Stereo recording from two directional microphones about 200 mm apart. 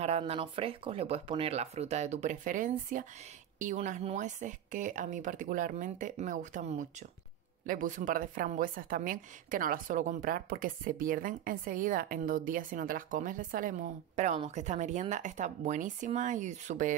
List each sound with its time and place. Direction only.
0.0 s a woman's voice: 30° right (ahead or behind)